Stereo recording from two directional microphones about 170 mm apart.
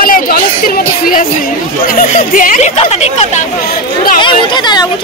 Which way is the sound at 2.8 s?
40° left (ahead or behind).